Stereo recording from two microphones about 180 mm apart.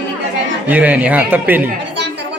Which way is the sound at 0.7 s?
10° right (ahead or behind).